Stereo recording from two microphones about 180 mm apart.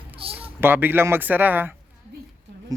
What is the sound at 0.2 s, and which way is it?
Cat, 30° right (ahead or behind).